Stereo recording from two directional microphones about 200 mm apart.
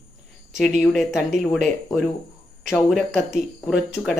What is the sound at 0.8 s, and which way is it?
Speech, centre (ahead or behind).